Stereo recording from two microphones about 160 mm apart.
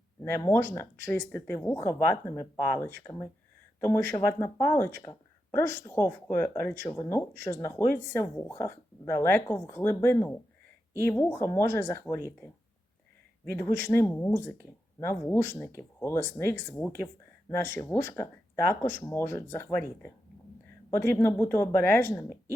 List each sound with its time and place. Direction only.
0.2 s speech: 15° left (ahead or behind)
13.6 s speech: 15° left (ahead or behind)